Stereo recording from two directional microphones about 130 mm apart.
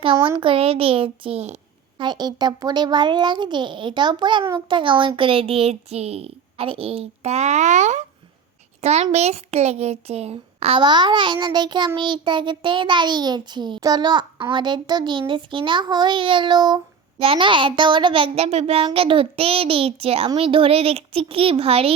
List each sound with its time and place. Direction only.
0.3 s speech: 40° right (ahead or behind)
2.0 s a child's voice: 35° right (ahead or behind); by 10.8 s 50° right (ahead or behind)
10.8 s a child's voice: 35° right (ahead or behind)